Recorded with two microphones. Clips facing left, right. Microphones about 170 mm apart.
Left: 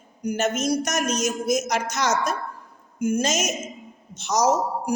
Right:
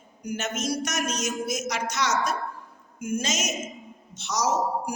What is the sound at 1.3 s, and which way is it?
Speech, 40° left (ahead or behind).